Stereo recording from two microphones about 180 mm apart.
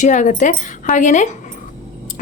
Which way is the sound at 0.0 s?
45° left (ahead or behind).